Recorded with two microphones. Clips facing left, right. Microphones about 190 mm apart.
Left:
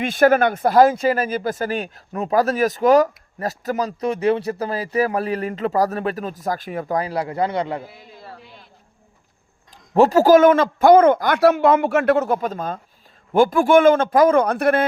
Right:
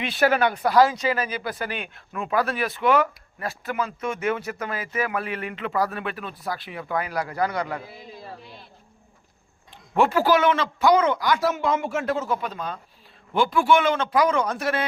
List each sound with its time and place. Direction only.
0.0 s speech: 45° left (ahead or behind); by 7.8 s 25° left (ahead or behind)
9.9 s a man's voice: 40° left (ahead or behind); by 12.4 s 65° left (ahead or behind)
12.4 s a man's voice: 45° left (ahead or behind)